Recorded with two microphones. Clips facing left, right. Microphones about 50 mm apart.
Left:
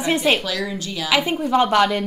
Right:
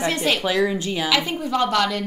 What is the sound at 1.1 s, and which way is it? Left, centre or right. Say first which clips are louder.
Speech: left 6 dB; centre.